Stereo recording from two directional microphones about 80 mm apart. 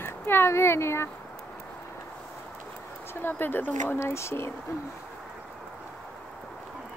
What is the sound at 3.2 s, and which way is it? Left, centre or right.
Speech, left.